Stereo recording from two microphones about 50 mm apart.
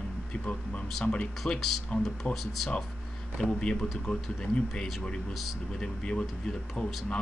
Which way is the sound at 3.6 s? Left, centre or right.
Centre.